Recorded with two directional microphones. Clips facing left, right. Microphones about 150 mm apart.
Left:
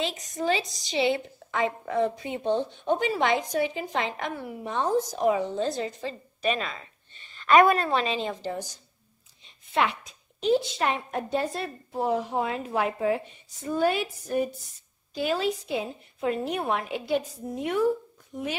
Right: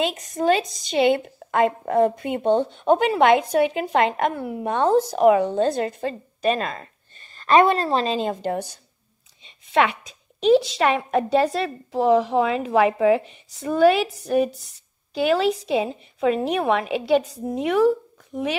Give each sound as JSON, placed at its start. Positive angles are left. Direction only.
{"t": 0.3, "sound": "a woman's voice", "side_deg": -55}
{"t": 4.6, "sound": "speech", "side_deg": -65}
{"t": 9.5, "sound": "a woman's voice", "side_deg": -85}